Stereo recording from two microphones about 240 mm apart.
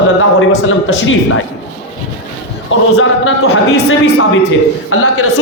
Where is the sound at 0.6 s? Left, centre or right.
Left.